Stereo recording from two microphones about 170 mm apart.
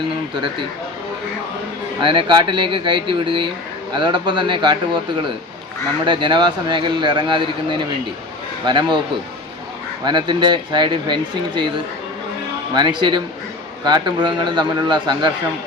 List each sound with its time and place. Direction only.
2.0 s a man's voice: 30° right (ahead or behind)
10.0 s a man's voice: 25° right (ahead or behind)
12.7 s a man's voice: 25° right (ahead or behind)